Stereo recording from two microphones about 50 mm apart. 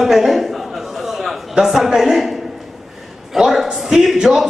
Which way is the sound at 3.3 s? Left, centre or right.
Centre.